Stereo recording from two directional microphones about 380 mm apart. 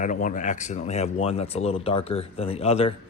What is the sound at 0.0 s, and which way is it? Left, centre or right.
Speech, centre.